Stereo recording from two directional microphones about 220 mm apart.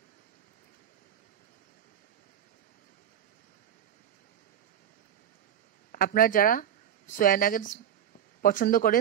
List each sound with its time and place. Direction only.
5.9 s speech: 40° left (ahead or behind)